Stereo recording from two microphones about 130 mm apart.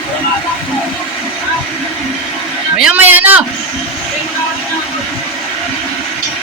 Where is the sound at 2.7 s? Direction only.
10° right (ahead or behind).